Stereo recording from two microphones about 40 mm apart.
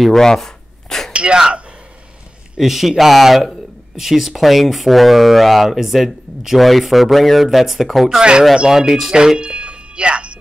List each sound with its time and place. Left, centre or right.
0.0 s a sound: centre
1.1 s a sound: right
2.5 s speech: centre
8.2 s speech: right
8.7 s speech: centre
9.4 s music: right